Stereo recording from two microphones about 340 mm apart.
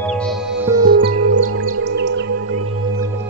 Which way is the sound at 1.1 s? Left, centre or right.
Right.